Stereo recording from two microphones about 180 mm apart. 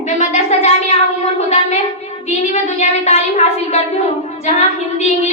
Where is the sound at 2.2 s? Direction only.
40° left (ahead or behind).